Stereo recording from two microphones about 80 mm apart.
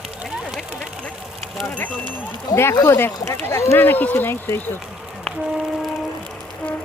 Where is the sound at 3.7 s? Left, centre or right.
Left.